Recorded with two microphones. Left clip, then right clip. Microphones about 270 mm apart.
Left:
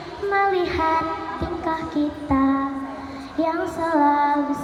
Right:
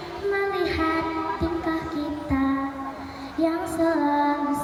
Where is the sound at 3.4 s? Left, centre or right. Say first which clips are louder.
Left 1 dB; centre.